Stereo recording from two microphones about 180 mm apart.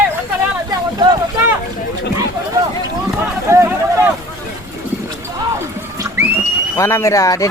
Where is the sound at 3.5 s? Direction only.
15° right (ahead or behind).